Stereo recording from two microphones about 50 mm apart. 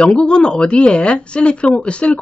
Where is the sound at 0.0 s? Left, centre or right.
Centre.